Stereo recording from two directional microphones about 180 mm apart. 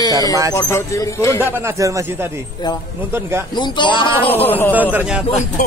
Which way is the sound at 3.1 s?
15° right (ahead or behind).